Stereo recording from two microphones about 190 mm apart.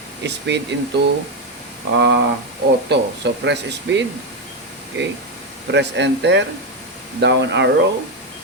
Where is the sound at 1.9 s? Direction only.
65° right (ahead or behind).